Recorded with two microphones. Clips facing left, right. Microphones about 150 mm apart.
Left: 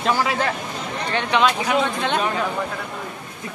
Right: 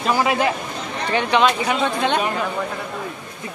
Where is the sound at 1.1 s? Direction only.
Centre (ahead or behind).